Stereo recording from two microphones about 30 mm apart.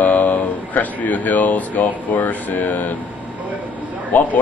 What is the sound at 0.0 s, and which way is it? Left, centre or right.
Speech, left.